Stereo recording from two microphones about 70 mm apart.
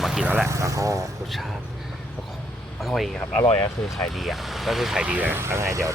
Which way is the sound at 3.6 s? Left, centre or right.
Left.